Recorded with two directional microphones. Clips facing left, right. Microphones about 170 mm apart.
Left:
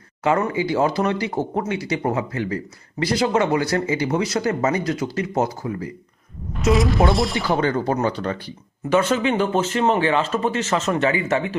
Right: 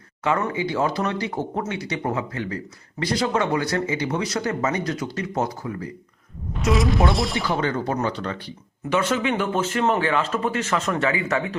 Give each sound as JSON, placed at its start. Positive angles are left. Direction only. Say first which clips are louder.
{"t": 0.6, "sound": "speech", "louder": "left 3 dB", "side_deg": 35}
{"t": 6.7, "sound": "speech", "louder": "left 3 dB", "side_deg": 0}
{"t": 7.4, "sound": "speech", "louder": "left 3 dB", "side_deg": 40}